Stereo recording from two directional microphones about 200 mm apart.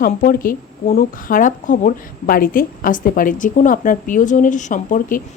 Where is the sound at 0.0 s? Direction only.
45° left (ahead or behind).